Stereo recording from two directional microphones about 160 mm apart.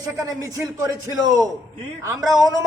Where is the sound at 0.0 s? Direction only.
20° right (ahead or behind).